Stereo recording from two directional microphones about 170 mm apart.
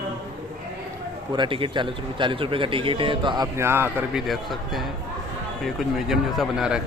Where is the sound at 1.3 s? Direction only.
30° right (ahead or behind).